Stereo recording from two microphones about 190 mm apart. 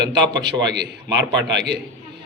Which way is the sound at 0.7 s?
65° right (ahead or behind).